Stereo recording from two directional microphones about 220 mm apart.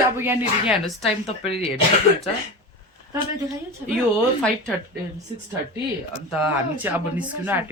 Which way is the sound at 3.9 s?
Centre (ahead or behind).